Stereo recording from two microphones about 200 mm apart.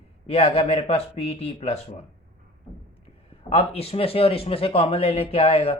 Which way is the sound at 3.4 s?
30° left (ahead or behind).